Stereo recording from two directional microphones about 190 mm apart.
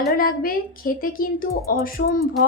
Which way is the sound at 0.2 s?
50° left (ahead or behind).